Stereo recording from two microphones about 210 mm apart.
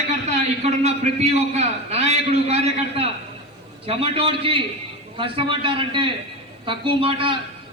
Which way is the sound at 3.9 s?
30° right (ahead or behind).